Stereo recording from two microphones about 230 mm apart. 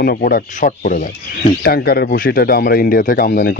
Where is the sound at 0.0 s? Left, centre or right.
Left.